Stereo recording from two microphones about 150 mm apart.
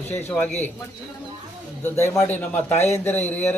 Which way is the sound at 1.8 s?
15° left (ahead or behind).